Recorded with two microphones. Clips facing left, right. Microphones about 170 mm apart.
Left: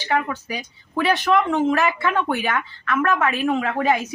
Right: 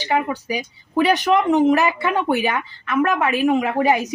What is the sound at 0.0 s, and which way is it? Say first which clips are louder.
Speech: right 2 dB; 15° right (ahead or behind).